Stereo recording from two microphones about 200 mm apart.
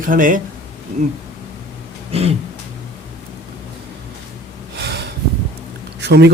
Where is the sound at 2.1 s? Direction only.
30° right (ahead or behind).